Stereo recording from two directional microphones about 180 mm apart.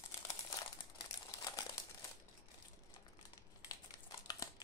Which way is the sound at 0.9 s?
20° left (ahead or behind).